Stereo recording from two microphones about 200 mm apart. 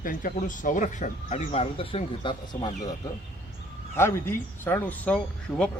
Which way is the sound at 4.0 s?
10° left (ahead or behind).